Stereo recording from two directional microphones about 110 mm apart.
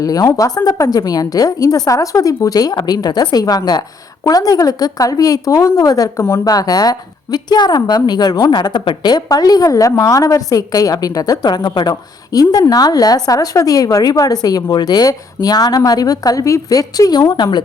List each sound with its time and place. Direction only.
0.0 s speech: 35° left (ahead or behind)